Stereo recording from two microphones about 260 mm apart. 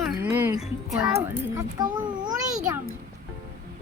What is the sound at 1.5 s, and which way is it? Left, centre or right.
Speech, centre.